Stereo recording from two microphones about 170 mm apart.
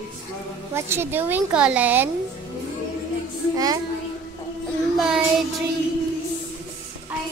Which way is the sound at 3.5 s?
20° right (ahead or behind).